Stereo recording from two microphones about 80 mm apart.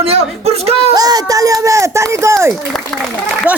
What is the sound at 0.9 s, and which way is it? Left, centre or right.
Speech, right.